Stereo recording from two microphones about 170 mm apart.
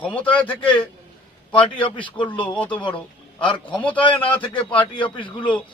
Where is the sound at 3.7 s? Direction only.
10° left (ahead or behind).